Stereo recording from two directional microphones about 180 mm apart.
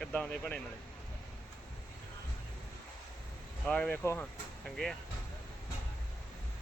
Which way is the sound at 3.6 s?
5° left (ahead or behind).